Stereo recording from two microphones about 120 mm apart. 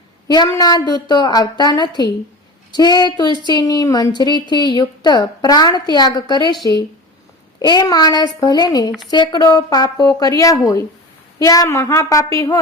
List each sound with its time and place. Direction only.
0.3 s a woman's voice: 30° left (ahead or behind)
7.6 s a woman's voice: 35° left (ahead or behind)